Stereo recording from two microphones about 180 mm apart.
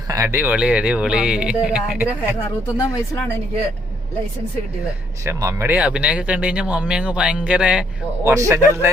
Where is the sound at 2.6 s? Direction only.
15° left (ahead or behind).